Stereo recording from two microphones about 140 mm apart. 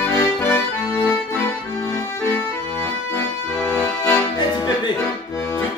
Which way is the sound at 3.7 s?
15° left (ahead or behind).